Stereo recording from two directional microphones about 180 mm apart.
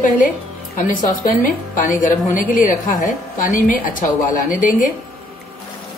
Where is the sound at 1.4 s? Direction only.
45° left (ahead or behind).